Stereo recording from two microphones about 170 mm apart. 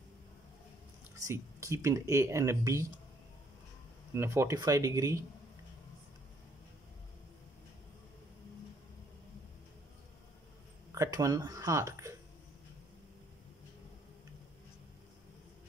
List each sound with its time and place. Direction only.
1.2 s speech: 15° right (ahead or behind)
4.1 s speech: 15° right (ahead or behind)
11.0 s speech: 20° right (ahead or behind)